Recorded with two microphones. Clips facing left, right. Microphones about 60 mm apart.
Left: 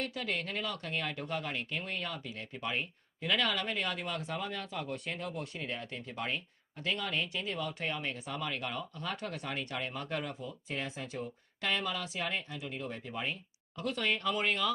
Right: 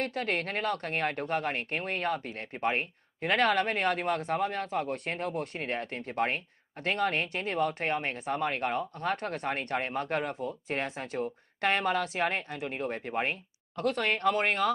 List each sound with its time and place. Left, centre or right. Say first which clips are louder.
0.0 s speech: right 5 dB; right